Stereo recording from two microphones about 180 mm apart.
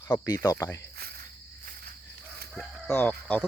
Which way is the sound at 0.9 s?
55° right (ahead or behind).